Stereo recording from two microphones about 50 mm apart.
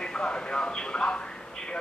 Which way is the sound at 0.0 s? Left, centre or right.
Centre.